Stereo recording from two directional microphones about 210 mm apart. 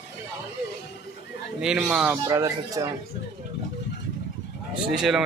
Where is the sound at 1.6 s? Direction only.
5° right (ahead or behind).